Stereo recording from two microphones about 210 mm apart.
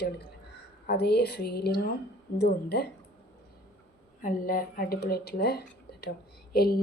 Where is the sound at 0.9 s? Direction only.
50° left (ahead or behind).